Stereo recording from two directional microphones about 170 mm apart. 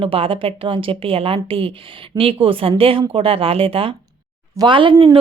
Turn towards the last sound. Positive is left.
turn(degrees=-30)  # may be behind; listen again after turning